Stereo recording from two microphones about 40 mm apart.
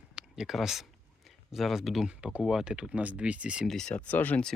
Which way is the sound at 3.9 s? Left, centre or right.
Left.